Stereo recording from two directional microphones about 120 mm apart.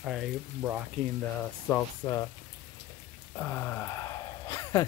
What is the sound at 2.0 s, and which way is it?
Speech, 30° left (ahead or behind).